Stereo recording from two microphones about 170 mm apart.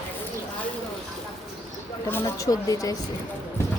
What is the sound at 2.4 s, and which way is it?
Speech, 20° left (ahead or behind).